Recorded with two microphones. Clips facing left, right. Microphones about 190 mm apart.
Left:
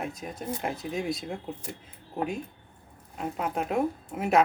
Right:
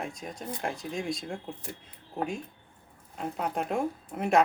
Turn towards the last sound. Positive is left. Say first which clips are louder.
# left 1 dB
turn(degrees=5)  # may be behind; listen again after turning